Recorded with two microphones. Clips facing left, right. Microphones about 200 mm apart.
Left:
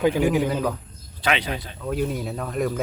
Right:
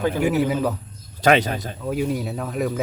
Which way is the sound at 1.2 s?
45° right (ahead or behind).